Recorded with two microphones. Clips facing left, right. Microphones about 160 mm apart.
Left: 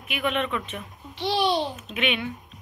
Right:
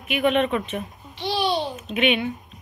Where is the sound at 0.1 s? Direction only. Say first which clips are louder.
Right 6 dB; 20° right (ahead or behind).